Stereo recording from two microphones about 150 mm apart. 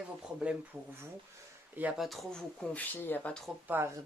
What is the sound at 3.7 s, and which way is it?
Speech, 15° right (ahead or behind).